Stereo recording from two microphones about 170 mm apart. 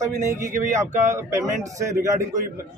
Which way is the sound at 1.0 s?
15° right (ahead or behind).